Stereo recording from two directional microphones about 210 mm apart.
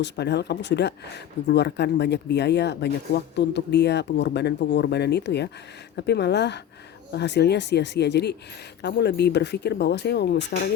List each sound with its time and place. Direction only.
0.0 s speech: 55° left (ahead or behind)